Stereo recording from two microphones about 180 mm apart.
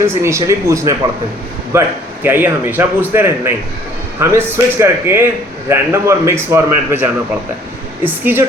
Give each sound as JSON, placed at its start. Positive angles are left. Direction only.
{"t": 0.0, "sound": "a man's voice", "side_deg": -15}